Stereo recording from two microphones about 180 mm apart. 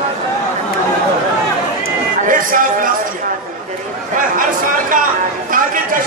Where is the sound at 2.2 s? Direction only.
50° right (ahead or behind).